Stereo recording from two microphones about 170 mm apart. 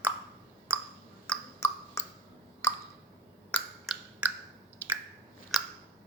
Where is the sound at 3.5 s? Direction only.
Centre (ahead or behind).